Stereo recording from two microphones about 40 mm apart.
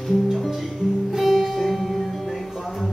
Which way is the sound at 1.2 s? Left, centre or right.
Centre.